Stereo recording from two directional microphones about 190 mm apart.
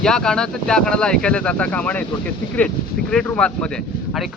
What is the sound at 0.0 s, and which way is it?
Speech, 5° left (ahead or behind).